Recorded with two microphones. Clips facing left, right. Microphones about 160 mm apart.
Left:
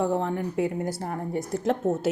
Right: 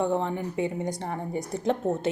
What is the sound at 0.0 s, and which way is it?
A woman's voice, centre (ahead or behind).